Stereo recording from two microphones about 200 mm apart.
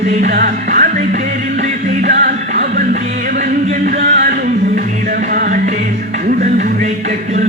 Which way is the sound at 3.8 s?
45° right (ahead or behind).